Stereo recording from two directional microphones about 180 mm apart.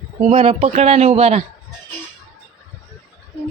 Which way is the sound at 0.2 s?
35° right (ahead or behind).